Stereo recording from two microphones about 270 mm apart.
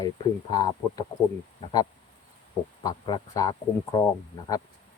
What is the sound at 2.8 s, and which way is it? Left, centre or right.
Speech, centre.